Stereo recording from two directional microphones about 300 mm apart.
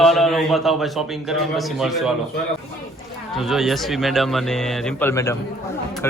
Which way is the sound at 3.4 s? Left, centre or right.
Centre.